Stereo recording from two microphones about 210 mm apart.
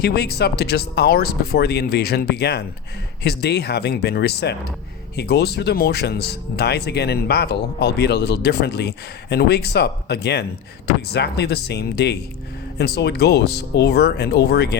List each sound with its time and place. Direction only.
0.0 s speech: 50° left (ahead or behind)